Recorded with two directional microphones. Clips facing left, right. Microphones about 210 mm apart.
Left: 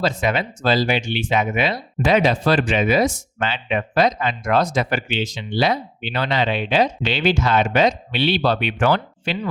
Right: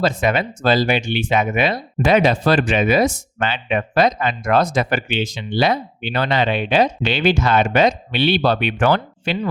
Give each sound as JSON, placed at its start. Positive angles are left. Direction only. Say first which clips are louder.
{"t": 0.0, "sound": "speech", "louder": "right 2 dB", "side_deg": -50}